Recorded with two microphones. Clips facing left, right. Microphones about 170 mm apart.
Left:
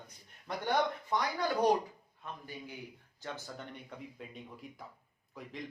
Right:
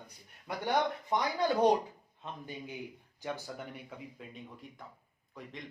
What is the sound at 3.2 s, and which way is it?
A man's voice, 10° right (ahead or behind).